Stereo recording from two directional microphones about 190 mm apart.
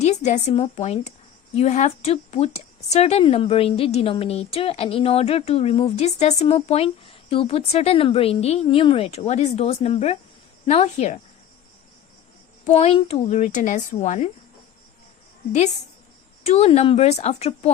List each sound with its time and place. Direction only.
0.0 s a woman's voice: 35° left (ahead or behind)
12.6 s a woman's voice: 35° left (ahead or behind)
16.5 s a woman's voice: 35° left (ahead or behind)